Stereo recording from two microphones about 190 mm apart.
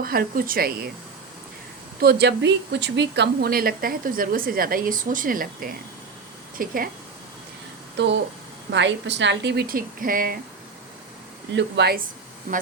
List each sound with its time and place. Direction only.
0.0 s speech: 50° right (ahead or behind)
2.0 s speech: 55° right (ahead or behind)
7.9 s a woman's voice: 65° right (ahead or behind); by 10.3 s 45° right (ahead or behind)
11.5 s a woman's voice: 60° right (ahead or behind)